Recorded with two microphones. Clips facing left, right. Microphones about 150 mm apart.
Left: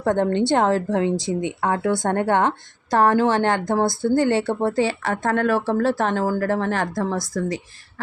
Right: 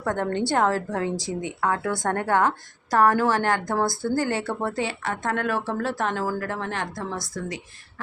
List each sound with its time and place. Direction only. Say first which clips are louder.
0.0 s a woman's voice: left 6 dB; 25° left (ahead or behind)